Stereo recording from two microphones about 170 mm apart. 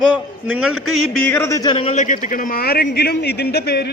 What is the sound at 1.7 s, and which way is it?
A man's voice, 40° left (ahead or behind).